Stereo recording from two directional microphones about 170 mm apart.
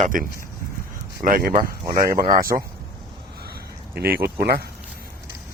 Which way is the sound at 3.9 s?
65° right (ahead or behind).